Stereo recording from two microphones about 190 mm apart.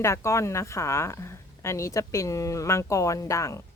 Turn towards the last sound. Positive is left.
turn(degrees=15)  # may be behind; listen again after turning